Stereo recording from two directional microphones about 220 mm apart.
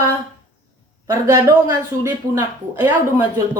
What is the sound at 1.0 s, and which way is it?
Speech, 15° right (ahead or behind).